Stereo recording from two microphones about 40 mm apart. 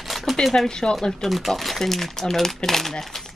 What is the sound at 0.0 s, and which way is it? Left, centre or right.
Shuffling cards, centre.